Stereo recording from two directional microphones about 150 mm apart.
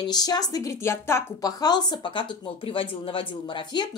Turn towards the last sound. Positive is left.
turn(degrees=30)  # may be behind; listen again after turning